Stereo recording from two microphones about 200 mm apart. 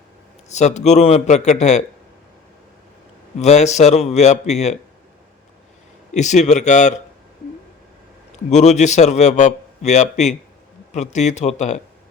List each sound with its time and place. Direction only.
0.4 s a man's voice: 35° left (ahead or behind)
3.3 s a man's voice: 35° left (ahead or behind)
6.1 s a man's voice: 35° left (ahead or behind)
8.4 s a man's voice: 35° left (ahead or behind)